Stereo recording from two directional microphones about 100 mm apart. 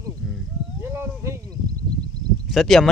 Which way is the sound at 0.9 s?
25° right (ahead or behind).